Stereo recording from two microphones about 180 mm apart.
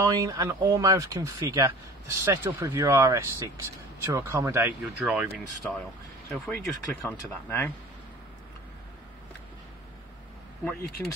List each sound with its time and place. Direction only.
0.0 s speech: 20° right (ahead or behind)
6.3 s speech: 10° left (ahead or behind)
10.6 s speech: 15° left (ahead or behind)